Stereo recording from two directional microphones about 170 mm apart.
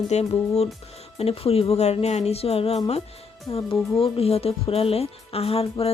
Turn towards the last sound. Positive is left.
turn(degrees=35)  # may be behind; listen again after turning